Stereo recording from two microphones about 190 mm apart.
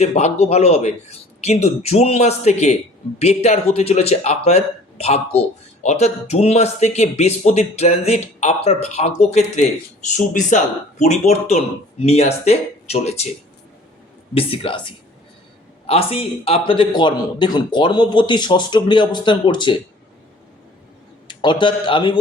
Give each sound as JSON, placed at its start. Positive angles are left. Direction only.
{"t": 0.0, "sound": "speech", "side_deg": 35}
{"t": 14.3, "sound": "speech", "side_deg": 30}
{"t": 21.2, "sound": "speech", "side_deg": 25}